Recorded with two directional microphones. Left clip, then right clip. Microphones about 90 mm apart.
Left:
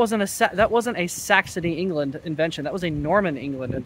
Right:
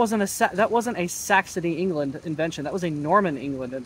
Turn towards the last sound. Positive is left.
turn(degrees=30)  # may be behind; listen again after turning